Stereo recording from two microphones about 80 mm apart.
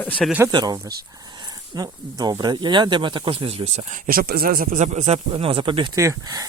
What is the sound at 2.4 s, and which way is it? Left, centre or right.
Speech, right.